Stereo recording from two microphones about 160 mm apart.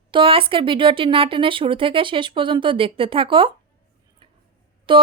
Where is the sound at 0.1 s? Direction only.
35° right (ahead or behind).